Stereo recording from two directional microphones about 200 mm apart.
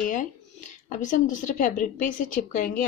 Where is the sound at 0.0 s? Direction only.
40° left (ahead or behind).